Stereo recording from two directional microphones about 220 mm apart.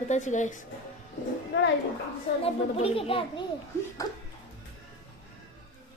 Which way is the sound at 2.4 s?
25° left (ahead or behind).